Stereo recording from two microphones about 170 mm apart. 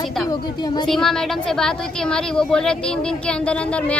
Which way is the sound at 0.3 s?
25° left (ahead or behind).